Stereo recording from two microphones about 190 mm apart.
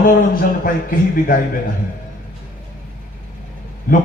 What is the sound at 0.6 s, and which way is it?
Speech, 45° left (ahead or behind).